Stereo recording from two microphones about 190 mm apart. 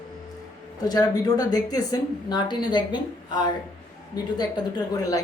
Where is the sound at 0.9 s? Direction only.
20° left (ahead or behind).